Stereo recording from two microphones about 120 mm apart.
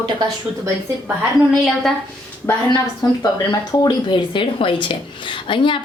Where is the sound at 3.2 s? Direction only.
40° left (ahead or behind).